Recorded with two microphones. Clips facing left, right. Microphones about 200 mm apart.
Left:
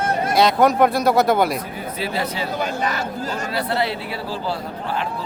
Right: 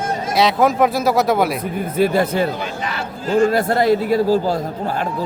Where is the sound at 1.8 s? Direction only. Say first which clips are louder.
Right 9 dB; 50° right (ahead or behind).